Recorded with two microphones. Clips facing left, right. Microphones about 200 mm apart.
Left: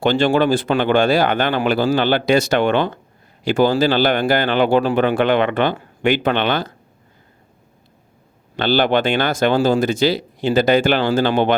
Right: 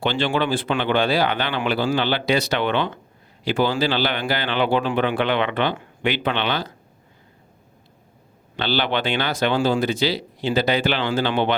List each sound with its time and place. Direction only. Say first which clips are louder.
0.0 s speech: left 6 dB; 45° left (ahead or behind)
8.5 s speech: left 6 dB; 50° left (ahead or behind)